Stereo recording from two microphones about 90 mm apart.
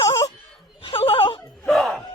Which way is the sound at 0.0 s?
40° left (ahead or behind).